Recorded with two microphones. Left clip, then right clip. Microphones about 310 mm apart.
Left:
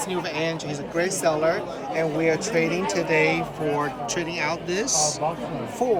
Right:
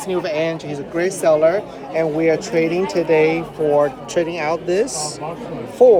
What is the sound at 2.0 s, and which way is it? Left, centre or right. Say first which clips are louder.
Speech: right 6 dB; right.